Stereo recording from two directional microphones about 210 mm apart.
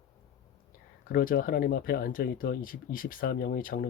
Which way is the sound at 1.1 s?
40° left (ahead or behind).